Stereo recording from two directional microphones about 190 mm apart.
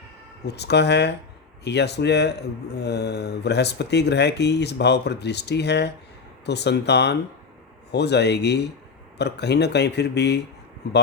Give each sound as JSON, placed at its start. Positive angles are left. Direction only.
{"t": 0.4, "sound": "speech", "side_deg": 60}